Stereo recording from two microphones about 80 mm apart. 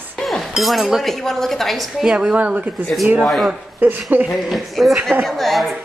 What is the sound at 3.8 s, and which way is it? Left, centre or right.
Speech, right.